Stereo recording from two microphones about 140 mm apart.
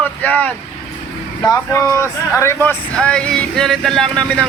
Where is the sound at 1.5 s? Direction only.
20° left (ahead or behind).